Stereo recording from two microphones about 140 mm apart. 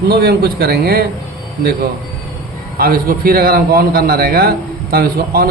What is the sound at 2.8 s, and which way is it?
A man's voice, 90° right.